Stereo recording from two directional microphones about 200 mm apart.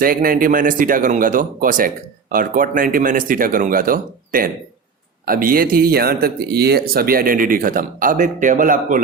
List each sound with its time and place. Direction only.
0.0 s speech: 45° right (ahead or behind)